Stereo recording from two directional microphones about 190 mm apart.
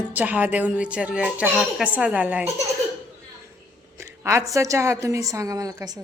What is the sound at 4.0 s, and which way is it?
Speech, 15° right (ahead or behind).